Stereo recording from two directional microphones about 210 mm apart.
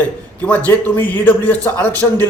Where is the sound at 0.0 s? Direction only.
5° left (ahead or behind).